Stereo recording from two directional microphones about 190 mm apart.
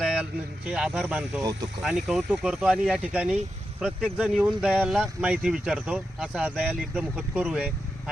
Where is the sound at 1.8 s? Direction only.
Centre (ahead or behind).